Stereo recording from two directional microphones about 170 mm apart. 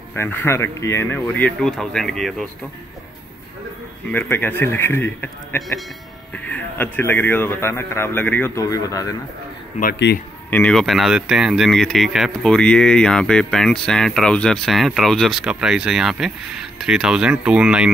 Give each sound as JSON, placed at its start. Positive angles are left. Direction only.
{"t": 0.1, "sound": "speech", "side_deg": 10}
{"t": 4.1, "sound": "speech", "side_deg": 10}
{"t": 10.1, "sound": "a man's voice", "side_deg": 85}
{"t": 10.5, "sound": "speech", "side_deg": 5}